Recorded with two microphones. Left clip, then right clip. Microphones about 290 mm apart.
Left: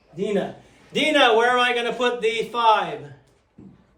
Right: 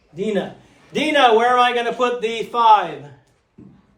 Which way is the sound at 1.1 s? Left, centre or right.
Right.